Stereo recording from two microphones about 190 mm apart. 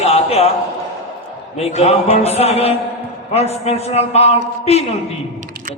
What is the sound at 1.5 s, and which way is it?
A man's voice, 35° left (ahead or behind).